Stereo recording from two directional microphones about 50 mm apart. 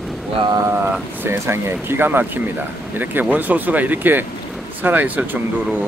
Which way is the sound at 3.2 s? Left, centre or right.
Right.